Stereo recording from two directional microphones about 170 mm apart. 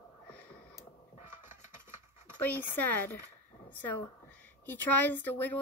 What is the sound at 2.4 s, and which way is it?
Speech, 10° left (ahead or behind).